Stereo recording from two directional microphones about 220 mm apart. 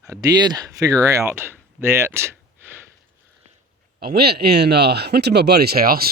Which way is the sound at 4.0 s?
45° right (ahead or behind).